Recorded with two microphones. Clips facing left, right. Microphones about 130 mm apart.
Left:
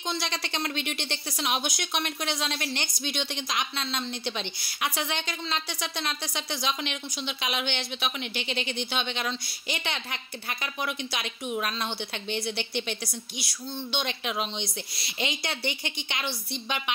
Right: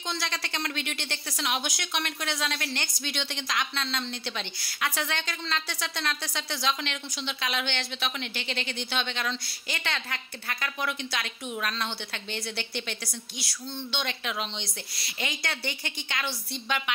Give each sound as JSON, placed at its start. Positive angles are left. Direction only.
{"t": 0.1, "sound": "a woman's voice", "side_deg": 20}